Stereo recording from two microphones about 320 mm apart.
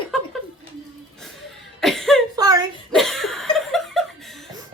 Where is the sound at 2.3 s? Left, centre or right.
Centre.